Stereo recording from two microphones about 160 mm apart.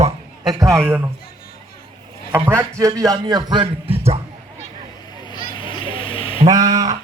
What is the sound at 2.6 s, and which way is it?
A man's voice, 20° right (ahead or behind).